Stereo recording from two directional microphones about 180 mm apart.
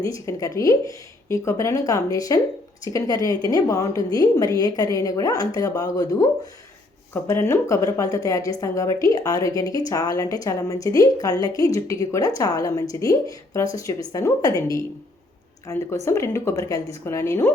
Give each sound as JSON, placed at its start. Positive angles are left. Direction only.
{"t": 0.0, "sound": "a woman's voice", "side_deg": 20}